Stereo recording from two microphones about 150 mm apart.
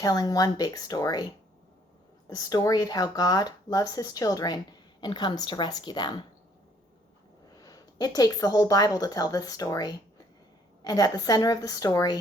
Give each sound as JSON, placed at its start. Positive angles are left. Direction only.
{"t": 0.0, "sound": "speech", "side_deg": 25}
{"t": 2.3, "sound": "speech", "side_deg": 25}
{"t": 7.5, "sound": "a woman's voice", "side_deg": 25}